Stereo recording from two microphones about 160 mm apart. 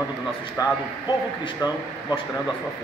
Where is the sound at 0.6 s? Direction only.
20° left (ahead or behind).